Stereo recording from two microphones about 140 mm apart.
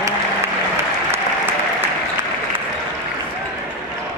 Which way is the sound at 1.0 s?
15° right (ahead or behind).